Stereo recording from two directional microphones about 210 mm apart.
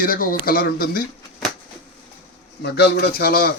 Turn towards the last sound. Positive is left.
turn(degrees=45)  # may be behind; listen again after turning